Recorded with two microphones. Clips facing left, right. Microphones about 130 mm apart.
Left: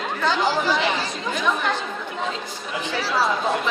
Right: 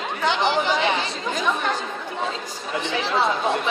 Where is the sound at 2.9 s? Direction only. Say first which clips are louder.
Even; 20° right (ahead or behind).